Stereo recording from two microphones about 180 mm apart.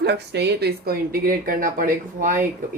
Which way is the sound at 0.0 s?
65° right (ahead or behind).